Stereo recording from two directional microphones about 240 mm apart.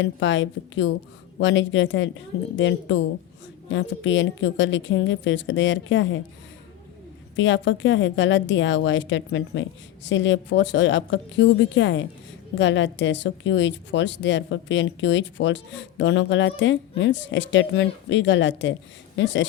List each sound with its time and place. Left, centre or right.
0.0 s a woman's voice: left
7.3 s a woman's voice: left